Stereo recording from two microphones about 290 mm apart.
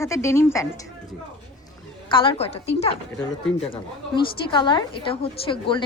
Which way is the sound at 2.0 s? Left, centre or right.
Centre.